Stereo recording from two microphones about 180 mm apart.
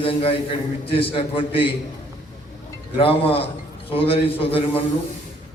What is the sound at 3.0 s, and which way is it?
A man's voice, 30° left (ahead or behind).